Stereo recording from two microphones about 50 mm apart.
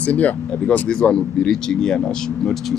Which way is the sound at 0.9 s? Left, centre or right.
Centre.